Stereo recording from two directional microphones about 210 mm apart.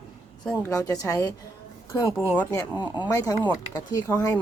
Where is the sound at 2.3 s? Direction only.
10° left (ahead or behind).